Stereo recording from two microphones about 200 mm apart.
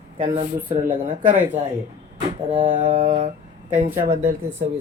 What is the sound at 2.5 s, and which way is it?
Speech, 40° right (ahead or behind).